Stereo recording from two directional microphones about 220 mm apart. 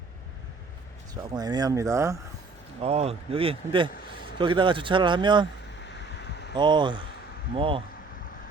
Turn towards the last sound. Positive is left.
turn(degrees=-25)  # may be behind; listen again after turning